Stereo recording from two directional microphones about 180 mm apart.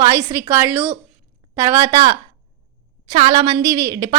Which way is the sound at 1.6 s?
15° right (ahead or behind).